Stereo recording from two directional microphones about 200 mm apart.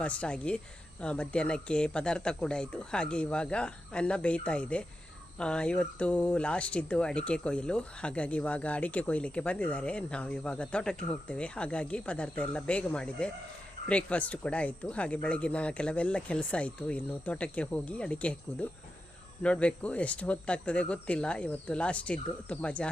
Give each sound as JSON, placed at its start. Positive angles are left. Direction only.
{"t": 0.0, "sound": "speech", "side_deg": 5}